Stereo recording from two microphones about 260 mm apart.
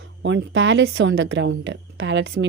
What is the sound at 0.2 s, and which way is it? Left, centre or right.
A woman's voice, right.